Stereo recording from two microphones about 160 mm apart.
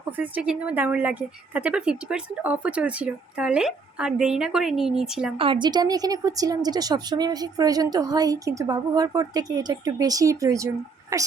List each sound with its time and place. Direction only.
0.2 s a woman's voice: 10° right (ahead or behind)
5.4 s a woman's voice: 30° right (ahead or behind)